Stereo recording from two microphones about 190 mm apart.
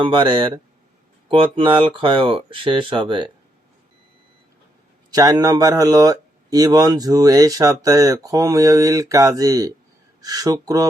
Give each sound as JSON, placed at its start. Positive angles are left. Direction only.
{"t": 0.0, "sound": "speech", "side_deg": -25}
{"t": 5.1, "sound": "speech", "side_deg": -20}